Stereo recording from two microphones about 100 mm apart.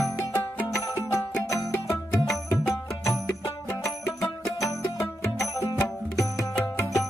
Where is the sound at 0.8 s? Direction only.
30° left (ahead or behind).